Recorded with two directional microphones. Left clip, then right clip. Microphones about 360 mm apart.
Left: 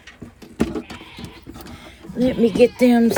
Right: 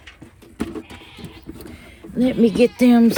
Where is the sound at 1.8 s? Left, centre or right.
Centre.